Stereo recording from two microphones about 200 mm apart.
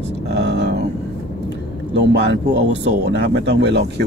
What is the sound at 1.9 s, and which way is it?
Speech, 60° right (ahead or behind).